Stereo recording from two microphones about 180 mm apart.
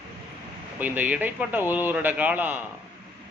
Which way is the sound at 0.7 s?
10° right (ahead or behind).